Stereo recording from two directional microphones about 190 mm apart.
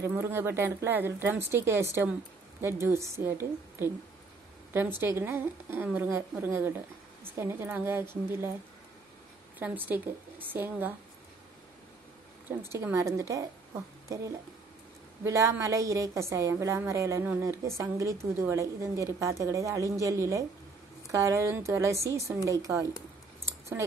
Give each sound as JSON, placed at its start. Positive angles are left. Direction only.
{"t": 0.0, "sound": "a woman's voice", "side_deg": -10}
{"t": 5.0, "sound": "a woman's voice", "side_deg": -10}
{"t": 9.6, "sound": "a woman's voice", "side_deg": -10}
{"t": 12.7, "sound": "a woman's voice", "side_deg": -15}